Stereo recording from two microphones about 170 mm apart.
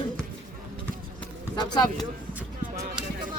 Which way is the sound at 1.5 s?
25° left (ahead or behind).